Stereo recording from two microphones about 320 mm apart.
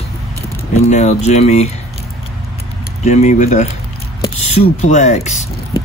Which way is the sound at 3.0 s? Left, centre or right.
Left.